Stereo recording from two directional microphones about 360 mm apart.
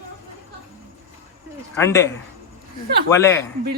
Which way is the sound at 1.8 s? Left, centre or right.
Centre.